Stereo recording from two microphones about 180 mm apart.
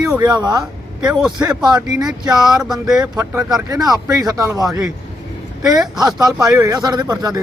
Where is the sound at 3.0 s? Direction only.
20° right (ahead or behind).